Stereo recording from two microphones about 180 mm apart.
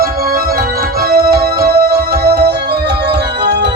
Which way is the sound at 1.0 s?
55° right (ahead or behind).